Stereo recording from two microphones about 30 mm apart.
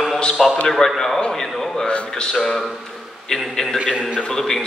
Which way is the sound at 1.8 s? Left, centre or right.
Left.